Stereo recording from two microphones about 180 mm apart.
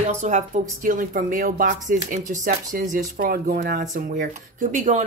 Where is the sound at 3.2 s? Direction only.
60° right (ahead or behind).